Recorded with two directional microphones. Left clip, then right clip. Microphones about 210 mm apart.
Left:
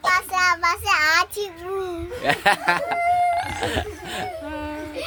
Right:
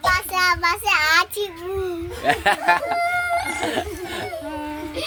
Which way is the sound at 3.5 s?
25° left (ahead or behind).